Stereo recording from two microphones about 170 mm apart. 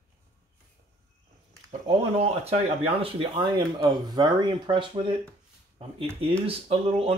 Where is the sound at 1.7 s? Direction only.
35° right (ahead or behind).